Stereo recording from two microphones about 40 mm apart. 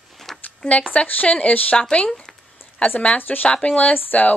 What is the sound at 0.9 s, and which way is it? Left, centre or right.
Speech, left.